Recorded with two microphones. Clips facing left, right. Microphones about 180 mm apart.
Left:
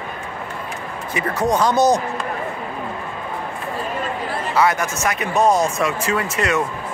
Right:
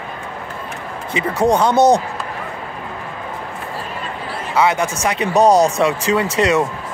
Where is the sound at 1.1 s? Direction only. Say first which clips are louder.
Right 4 dB; 30° right (ahead or behind).